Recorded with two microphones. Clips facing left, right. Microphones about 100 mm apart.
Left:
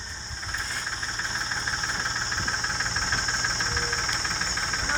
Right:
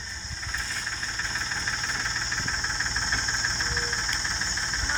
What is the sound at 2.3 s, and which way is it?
Engine knocking, 35° left (ahead or behind).